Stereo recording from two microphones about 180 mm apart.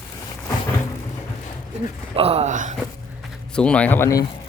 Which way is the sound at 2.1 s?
35° right (ahead or behind).